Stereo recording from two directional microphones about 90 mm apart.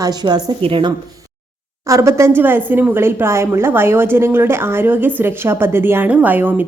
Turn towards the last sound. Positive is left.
turn(degrees=-20)  # may be behind; listen again after turning